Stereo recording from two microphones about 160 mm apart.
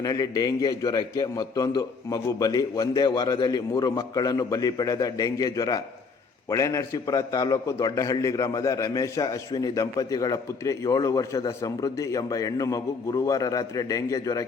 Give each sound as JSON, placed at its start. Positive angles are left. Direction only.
{"t": 0.0, "sound": "a man's voice", "side_deg": 25}